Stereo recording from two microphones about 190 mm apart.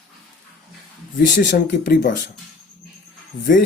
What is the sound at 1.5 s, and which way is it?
Speech, 45° left (ahead or behind).